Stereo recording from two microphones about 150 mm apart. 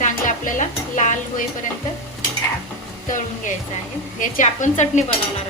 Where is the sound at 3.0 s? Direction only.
60° left (ahead or behind).